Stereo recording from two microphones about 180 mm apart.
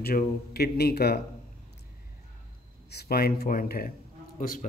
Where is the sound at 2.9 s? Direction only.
60° left (ahead or behind).